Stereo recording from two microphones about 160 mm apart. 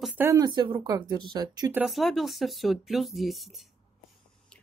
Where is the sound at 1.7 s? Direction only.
5° right (ahead or behind).